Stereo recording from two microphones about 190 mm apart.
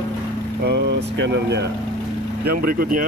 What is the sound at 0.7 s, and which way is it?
Speech, 60° right (ahead or behind).